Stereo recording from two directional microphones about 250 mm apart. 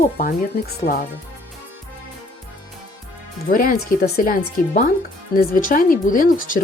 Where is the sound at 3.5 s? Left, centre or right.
Left.